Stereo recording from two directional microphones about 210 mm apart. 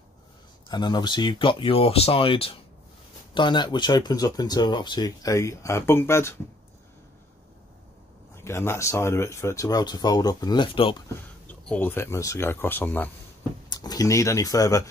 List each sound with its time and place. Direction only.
0.7 s speech: 20° left (ahead or behind)
8.5 s speech: 10° left (ahead or behind)
11.4 s speech: 5° left (ahead or behind)